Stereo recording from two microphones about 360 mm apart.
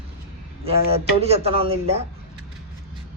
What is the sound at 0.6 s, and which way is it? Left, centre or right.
Speech, centre.